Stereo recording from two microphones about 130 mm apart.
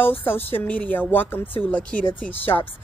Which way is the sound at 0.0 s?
15° left (ahead or behind).